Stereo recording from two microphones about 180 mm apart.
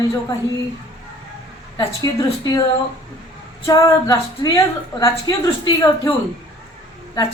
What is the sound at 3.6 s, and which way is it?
A woman's voice, 20° left (ahead or behind).